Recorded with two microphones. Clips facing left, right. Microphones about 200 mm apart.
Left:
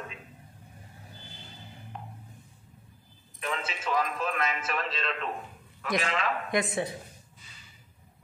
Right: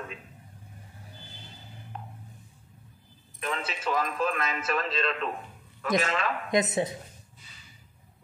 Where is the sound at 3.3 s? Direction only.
40° right (ahead or behind).